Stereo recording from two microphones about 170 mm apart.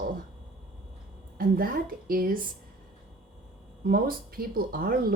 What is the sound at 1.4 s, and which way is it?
Speech, 60° right (ahead or behind).